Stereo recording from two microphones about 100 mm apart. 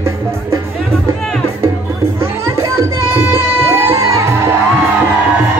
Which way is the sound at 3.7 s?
30° right (ahead or behind).